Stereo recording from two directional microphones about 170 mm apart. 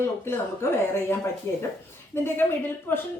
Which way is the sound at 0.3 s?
15° left (ahead or behind).